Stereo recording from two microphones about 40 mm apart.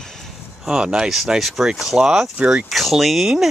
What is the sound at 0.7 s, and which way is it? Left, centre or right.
Speech, centre.